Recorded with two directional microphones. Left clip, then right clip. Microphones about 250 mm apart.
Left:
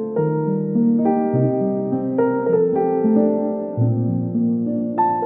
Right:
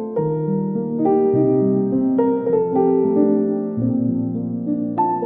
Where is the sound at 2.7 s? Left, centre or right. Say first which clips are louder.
Right 2 dB; centre.